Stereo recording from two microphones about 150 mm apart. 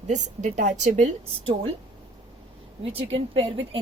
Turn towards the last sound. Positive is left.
turn(degrees=-40)  # may be behind; listen again after turning